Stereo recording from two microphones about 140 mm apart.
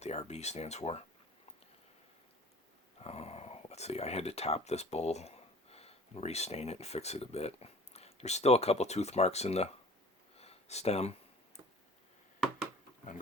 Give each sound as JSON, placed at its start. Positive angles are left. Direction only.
{"t": 0.0, "sound": "speech", "side_deg": 50}
{"t": 3.0, "sound": "speech", "side_deg": 45}
{"t": 10.3, "sound": "a sound", "side_deg": 45}